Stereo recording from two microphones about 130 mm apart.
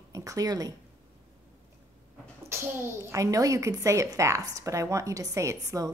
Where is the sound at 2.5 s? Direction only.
20° right (ahead or behind).